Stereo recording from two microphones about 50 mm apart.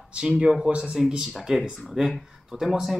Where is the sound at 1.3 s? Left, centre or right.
Centre.